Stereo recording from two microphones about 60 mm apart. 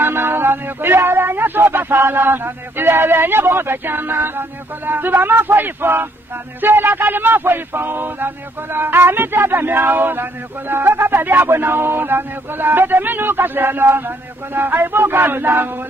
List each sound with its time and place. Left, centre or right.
0.0 s speech: right